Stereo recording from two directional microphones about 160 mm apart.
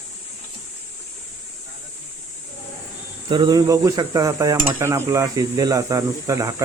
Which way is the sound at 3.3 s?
25° right (ahead or behind).